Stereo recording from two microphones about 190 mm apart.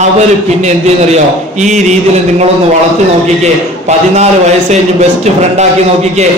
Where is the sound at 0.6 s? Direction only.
35° right (ahead or behind).